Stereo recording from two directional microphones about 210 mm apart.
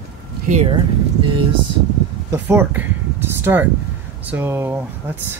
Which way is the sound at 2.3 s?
10° right (ahead or behind).